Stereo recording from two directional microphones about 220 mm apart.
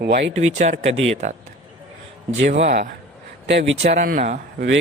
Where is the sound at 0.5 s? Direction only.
35° right (ahead or behind).